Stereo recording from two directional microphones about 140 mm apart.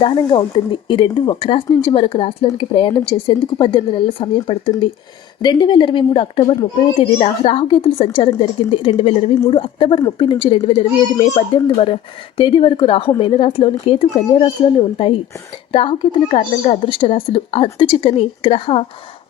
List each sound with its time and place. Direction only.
0.0 s speech: 35° left (ahead or behind)